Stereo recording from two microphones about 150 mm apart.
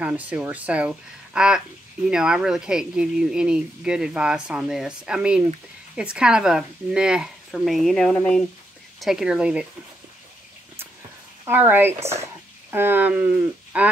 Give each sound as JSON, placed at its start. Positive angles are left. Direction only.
{"t": 0.0, "sound": "speech", "side_deg": -10}
{"t": 11.4, "sound": "speech", "side_deg": -15}
{"t": 12.0, "sound": "speech", "side_deg": -45}
{"t": 12.7, "sound": "speech", "side_deg": -15}